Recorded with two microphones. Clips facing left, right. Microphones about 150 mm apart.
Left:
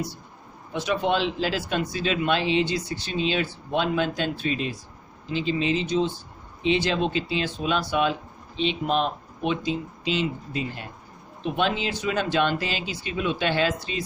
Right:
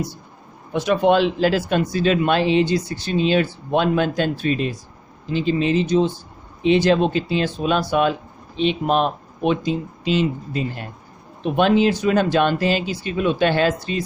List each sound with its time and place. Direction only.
0.7 s speech: 50° right (ahead or behind)